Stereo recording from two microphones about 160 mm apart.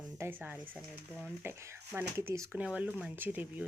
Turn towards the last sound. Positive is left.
turn(degrees=-10)  # may be behind; listen again after turning